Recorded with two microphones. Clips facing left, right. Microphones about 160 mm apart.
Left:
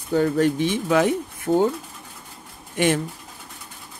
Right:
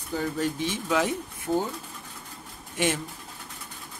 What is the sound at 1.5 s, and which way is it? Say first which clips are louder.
Speech: left 6 dB; 80° left.